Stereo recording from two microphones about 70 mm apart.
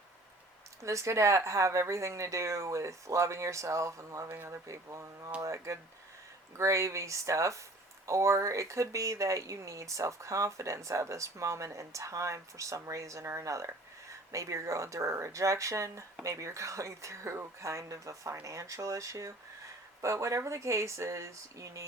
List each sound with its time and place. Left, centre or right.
0.8 s speech: right